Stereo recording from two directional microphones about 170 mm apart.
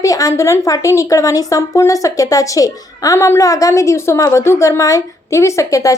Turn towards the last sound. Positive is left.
turn(degrees=20)  # may be behind; listen again after turning